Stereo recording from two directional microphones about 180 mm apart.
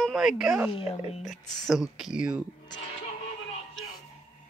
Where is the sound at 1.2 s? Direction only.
Centre (ahead or behind).